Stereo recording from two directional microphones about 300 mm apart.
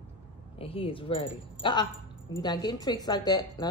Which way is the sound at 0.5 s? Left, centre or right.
Centre.